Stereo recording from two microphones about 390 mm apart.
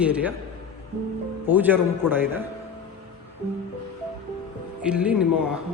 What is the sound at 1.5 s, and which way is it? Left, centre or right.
Speech, centre.